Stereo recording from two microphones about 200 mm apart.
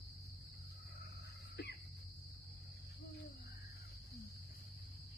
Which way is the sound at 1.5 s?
55° left (ahead or behind).